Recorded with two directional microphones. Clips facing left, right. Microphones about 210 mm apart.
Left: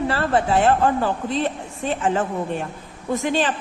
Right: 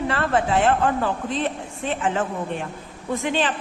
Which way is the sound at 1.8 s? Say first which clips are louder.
Left 2 dB; 40° left (ahead or behind).